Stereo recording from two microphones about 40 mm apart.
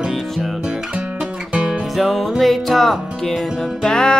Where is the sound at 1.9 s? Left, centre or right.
Centre.